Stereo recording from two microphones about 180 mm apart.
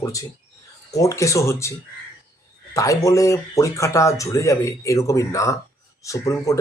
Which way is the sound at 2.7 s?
20° left (ahead or behind).